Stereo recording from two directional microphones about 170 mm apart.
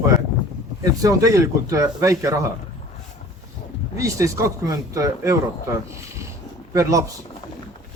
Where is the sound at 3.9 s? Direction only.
20° right (ahead or behind).